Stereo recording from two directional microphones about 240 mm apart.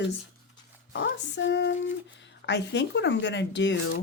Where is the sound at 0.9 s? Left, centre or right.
Left.